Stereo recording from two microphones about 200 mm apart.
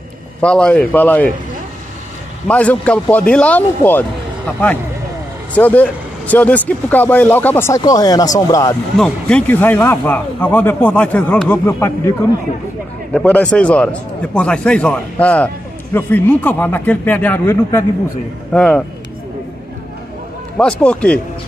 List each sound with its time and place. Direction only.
0.4 s a man's voice: 5° left (ahead or behind)
2.4 s a man's voice: 5° left (ahead or behind)
5.5 s a man's voice: 10° left (ahead or behind)
8.9 s a man's voice: 5° left (ahead or behind)
20.5 s speech: 5° left (ahead or behind)